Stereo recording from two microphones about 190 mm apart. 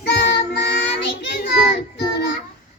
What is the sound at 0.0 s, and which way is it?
Child singing, 60° left (ahead or behind).